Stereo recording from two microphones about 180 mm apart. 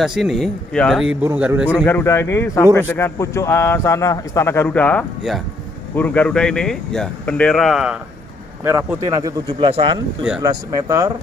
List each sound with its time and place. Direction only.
0.0 s speech: centre (ahead or behind)
1.2 s a man's voice: 10° right (ahead or behind)
1.7 s a man's voice: 10° left (ahead or behind)
8.6 s speech: 20° right (ahead or behind)
10.5 s speech: 20° right (ahead or behind)